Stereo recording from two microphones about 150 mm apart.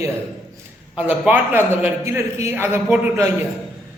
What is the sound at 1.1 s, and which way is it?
A woman's voice, 10° right (ahead or behind).